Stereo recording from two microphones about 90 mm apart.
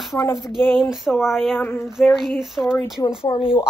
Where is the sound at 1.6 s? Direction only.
25° left (ahead or behind).